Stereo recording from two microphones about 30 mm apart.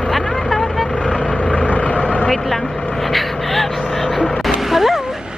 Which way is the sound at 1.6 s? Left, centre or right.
Left.